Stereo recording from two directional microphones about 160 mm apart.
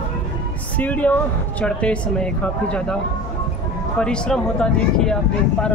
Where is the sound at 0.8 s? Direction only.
10° left (ahead or behind).